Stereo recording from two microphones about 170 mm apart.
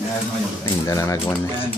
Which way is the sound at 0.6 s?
20° left (ahead or behind).